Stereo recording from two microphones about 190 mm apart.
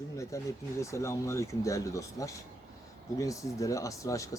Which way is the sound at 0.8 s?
15° left (ahead or behind).